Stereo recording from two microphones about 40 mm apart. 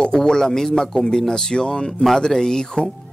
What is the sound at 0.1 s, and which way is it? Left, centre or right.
Speech, centre.